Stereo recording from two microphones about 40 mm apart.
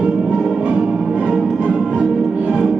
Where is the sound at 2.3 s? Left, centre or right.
Right.